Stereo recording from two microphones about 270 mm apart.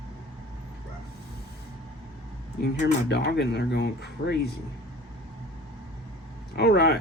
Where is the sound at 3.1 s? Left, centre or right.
Left.